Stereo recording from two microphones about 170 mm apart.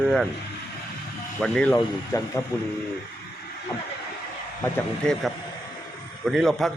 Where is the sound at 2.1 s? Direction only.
20° left (ahead or behind).